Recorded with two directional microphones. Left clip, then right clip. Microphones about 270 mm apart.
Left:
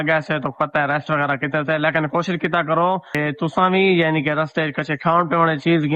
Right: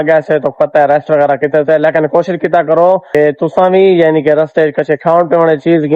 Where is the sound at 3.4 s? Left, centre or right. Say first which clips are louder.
Right 9 dB; centre.